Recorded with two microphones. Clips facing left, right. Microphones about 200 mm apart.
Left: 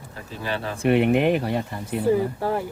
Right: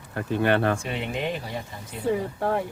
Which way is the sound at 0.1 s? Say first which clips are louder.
Right 8 dB; 60° right (ahead or behind).